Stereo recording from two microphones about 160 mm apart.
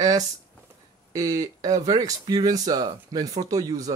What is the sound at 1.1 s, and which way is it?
Speech, 25° right (ahead or behind).